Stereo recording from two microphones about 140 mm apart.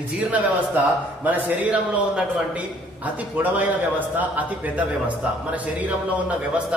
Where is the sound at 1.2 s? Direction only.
10° right (ahead or behind).